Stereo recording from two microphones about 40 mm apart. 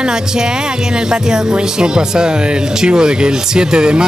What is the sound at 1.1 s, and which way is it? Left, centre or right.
Speech, centre.